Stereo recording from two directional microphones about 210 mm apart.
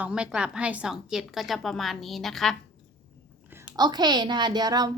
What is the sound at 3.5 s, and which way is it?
A woman's voice, 10° right (ahead or behind).